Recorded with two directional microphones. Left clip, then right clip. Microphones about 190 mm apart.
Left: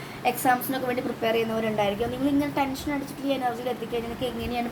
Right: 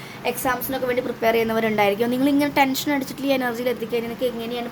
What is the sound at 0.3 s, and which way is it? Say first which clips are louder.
Speech: even; 15° right (ahead or behind).